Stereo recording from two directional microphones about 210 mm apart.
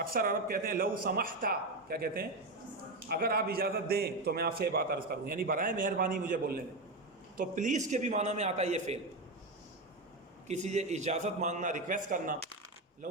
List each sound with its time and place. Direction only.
0.0 s a man's voice: 45° right (ahead or behind)
10.5 s a man's voice: 35° right (ahead or behind)